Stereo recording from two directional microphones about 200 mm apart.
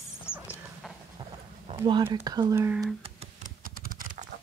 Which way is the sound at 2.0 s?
15° right (ahead or behind).